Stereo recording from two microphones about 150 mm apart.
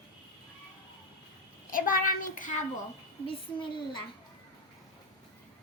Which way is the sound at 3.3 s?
35° left (ahead or behind).